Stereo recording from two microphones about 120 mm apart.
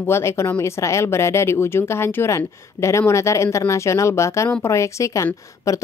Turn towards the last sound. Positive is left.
turn(degrees=25)  # may be behind; listen again after turning